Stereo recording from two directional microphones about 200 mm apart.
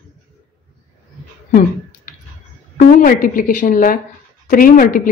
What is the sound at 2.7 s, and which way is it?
A woman's voice, 40° left (ahead or behind).